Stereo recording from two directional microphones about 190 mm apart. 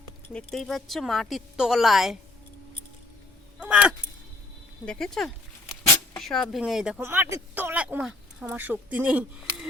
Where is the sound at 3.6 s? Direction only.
5° right (ahead or behind).